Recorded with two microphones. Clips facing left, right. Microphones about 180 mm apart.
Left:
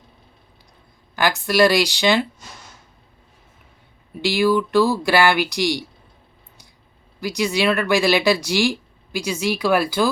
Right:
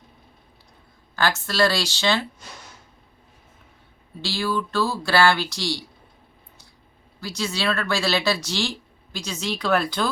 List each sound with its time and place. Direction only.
1.1 s speech: 15° left (ahead or behind)
4.1 s speech: 15° left (ahead or behind)
7.2 s speech: 15° left (ahead or behind)